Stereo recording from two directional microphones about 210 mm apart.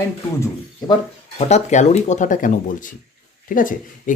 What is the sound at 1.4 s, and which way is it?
Speech, 30° left (ahead or behind).